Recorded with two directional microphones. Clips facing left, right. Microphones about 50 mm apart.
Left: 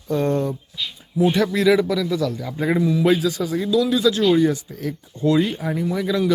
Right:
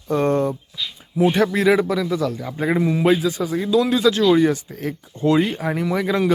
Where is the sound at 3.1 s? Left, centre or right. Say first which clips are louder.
Right 1 dB; right.